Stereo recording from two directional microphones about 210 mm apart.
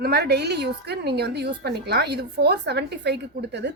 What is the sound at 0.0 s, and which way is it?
A woman's voice, 50° right (ahead or behind).